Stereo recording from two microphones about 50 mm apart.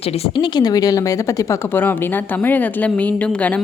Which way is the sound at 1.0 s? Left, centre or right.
Left.